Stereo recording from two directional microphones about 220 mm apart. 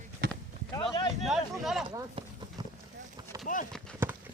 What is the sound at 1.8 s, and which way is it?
Speech, 25° right (ahead or behind).